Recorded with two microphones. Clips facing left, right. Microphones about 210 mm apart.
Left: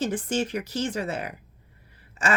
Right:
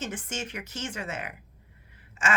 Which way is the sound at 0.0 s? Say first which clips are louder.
Left 9 dB; 35° left (ahead or behind).